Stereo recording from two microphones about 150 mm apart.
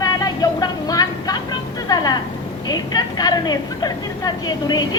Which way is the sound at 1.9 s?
25° left (ahead or behind).